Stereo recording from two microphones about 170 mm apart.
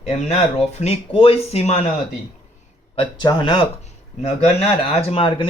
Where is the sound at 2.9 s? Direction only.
30° left (ahead or behind).